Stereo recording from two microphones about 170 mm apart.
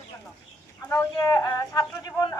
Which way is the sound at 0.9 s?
20° left (ahead or behind).